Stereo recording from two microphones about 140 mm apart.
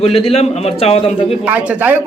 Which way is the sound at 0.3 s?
50° left (ahead or behind).